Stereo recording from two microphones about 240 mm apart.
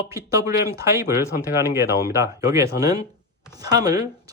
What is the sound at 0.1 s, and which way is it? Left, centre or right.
Speech, centre.